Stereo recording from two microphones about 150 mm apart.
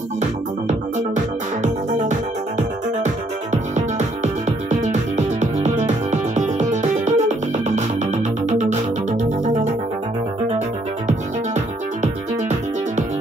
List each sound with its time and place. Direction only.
0.7 s music: 55° right (ahead or behind)
11.1 s music: 50° right (ahead or behind)